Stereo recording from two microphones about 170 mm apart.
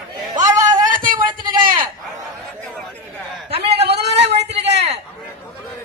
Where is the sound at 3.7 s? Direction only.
80° right.